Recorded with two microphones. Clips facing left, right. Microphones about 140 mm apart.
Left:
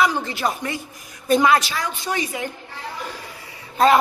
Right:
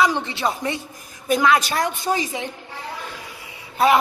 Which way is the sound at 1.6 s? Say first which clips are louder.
Right 5 dB; 50° right (ahead or behind).